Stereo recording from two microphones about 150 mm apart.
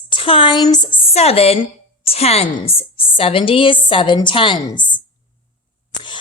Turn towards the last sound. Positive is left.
turn(degrees=30)  # may be behind; listen again after turning